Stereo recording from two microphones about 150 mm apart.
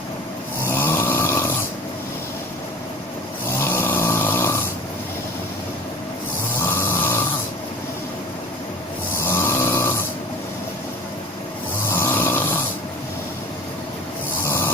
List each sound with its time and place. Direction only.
0.6 s snoring: 15° left (ahead or behind)
3.6 s vehicle: 15° left (ahead or behind)
6.6 s snoring: 15° left (ahead or behind)
9.1 s snoring: 15° left (ahead or behind)
11.9 s snoring: 15° left (ahead or behind)
14.4 s snoring: 15° left (ahead or behind)